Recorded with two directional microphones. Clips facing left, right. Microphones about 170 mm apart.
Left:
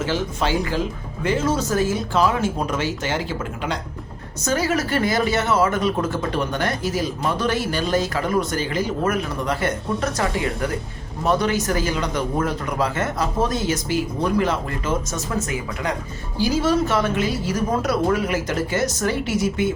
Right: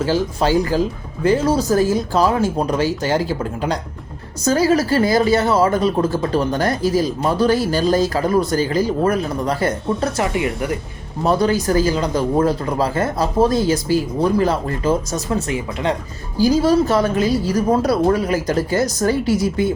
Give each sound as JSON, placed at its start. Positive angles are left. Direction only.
{"t": 0.0, "sound": "speech", "side_deg": -35}